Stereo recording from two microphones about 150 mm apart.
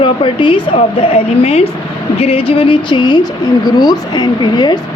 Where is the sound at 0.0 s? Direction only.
35° left (ahead or behind).